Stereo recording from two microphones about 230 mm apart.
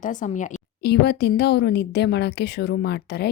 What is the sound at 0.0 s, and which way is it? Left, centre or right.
A woman's voice, left.